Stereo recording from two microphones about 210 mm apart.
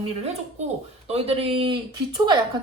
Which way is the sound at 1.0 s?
30° right (ahead or behind).